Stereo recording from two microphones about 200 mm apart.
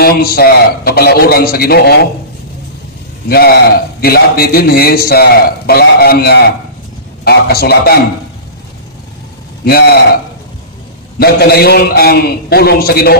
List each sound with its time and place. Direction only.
0.0 s a man's voice: 50° left (ahead or behind)
3.3 s a man's voice: 50° left (ahead or behind)
9.7 s a man's voice: 50° left (ahead or behind)
11.1 s a man's voice: 50° left (ahead or behind)